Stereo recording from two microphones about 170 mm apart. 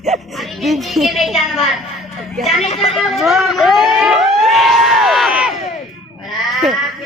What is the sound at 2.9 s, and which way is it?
Vehicle, centre (ahead or behind).